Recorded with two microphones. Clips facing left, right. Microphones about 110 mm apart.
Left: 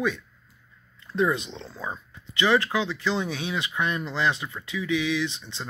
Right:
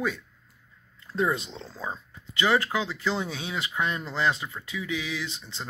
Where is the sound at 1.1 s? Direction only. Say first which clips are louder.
Left 2 dB; 35° right (ahead or behind).